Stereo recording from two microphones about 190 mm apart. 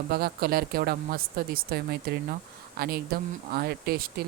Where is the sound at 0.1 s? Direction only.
50° right (ahead or behind).